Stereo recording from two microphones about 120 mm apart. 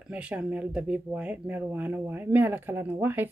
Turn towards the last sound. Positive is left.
turn(degrees=-20)  # may be behind; listen again after turning